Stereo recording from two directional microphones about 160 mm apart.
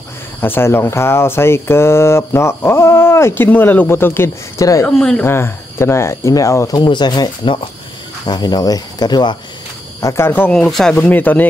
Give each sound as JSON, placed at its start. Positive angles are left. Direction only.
{"t": 0.4, "sound": "speech", "side_deg": 15}
{"t": 4.8, "sound": "speech", "side_deg": 5}